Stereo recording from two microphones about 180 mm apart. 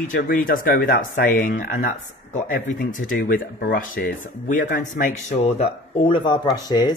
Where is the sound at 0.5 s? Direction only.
50° left (ahead or behind).